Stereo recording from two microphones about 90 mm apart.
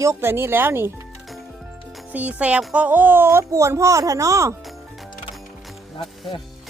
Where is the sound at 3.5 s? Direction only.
35° right (ahead or behind).